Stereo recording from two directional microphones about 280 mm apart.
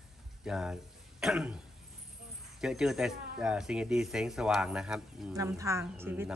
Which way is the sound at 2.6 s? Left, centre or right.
Centre.